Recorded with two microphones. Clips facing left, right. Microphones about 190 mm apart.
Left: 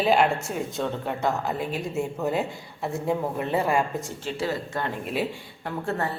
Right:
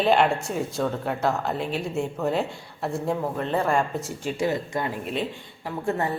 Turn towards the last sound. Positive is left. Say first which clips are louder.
# right 2 dB
turn(degrees=-15)  # may be behind; listen again after turning